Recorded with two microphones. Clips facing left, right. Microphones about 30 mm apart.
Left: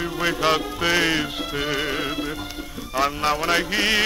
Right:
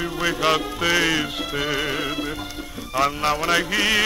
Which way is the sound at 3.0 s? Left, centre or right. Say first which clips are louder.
Right 1 dB; centre.